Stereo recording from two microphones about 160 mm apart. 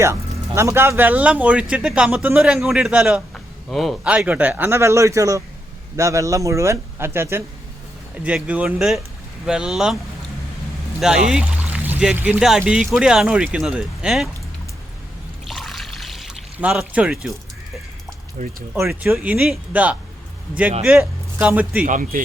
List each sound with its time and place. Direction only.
0.0 s speech: 15° right (ahead or behind)
11.0 s speech: 5° right (ahead or behind)
15.4 s pour: centre (ahead or behind)
18.4 s speech: 45° right (ahead or behind)
18.8 s speech: 15° right (ahead or behind)
21.0 s speech: 10° right (ahead or behind)
21.8 s a man's voice: 55° right (ahead or behind)